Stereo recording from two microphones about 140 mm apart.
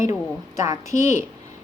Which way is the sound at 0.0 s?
20° right (ahead or behind).